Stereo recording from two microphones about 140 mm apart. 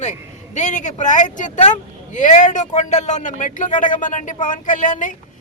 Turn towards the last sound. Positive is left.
turn(degrees=65)  # may be behind; listen again after turning